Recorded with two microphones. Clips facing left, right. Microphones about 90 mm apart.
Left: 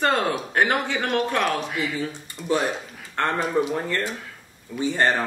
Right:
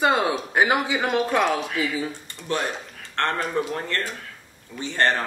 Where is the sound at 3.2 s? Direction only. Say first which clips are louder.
Left 2 dB; 10° left (ahead or behind).